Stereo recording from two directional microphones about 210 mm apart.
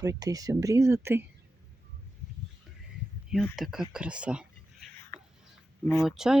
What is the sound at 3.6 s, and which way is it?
Speech, centre (ahead or behind).